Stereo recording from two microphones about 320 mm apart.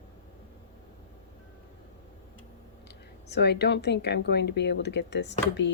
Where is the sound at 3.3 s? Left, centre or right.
Left.